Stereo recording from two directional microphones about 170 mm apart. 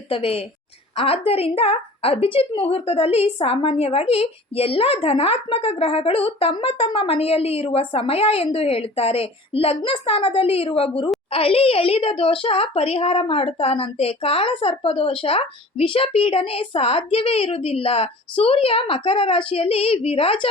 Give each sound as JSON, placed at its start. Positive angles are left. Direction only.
{"t": 0.1, "sound": "a woman's voice", "side_deg": 35}